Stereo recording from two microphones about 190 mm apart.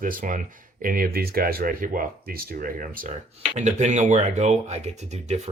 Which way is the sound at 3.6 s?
35° right (ahead or behind).